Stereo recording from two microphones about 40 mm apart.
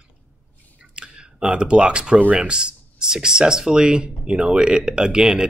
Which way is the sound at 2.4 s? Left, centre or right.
Right.